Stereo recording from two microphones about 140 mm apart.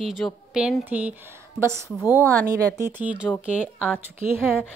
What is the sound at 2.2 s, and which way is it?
Speech, 25° right (ahead or behind).